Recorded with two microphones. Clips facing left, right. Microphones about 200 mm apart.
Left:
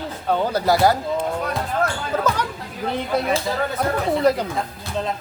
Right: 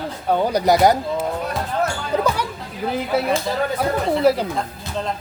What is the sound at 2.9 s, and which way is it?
Speech, 5° right (ahead or behind).